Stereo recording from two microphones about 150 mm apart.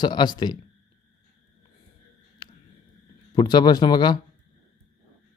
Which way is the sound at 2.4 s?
30° left (ahead or behind).